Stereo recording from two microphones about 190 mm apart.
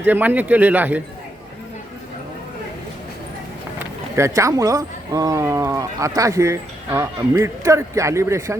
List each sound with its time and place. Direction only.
0.0 s speech: 10° right (ahead or behind)
4.1 s speech: 15° right (ahead or behind)